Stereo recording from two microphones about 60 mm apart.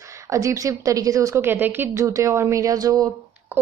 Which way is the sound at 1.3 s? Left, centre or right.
Right.